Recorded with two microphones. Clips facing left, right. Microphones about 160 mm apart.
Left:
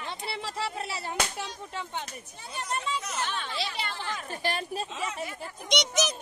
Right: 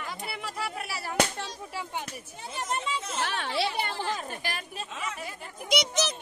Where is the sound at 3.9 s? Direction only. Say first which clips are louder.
Right 4 dB; 30° right (ahead or behind).